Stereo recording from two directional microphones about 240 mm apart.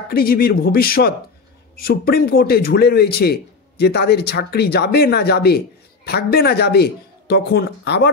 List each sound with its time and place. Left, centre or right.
0.1 s a man's voice: left